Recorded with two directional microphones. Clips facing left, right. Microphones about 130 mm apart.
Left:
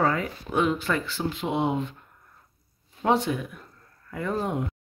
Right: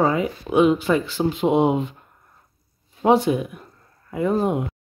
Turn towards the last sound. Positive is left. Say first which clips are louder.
# right 7 dB
turn(degrees=-15)  # may be behind; listen again after turning